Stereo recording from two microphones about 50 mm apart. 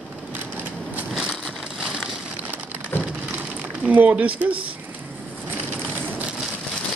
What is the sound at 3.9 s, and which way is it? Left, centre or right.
Speech, right.